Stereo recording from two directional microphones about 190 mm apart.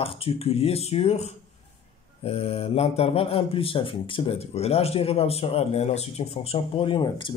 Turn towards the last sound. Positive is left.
turn(degrees=25)  # may be behind; listen again after turning